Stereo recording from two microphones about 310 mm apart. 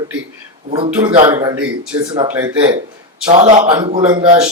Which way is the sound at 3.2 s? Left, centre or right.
Right.